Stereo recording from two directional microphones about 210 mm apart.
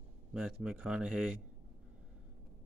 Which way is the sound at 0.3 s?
Centre (ahead or behind).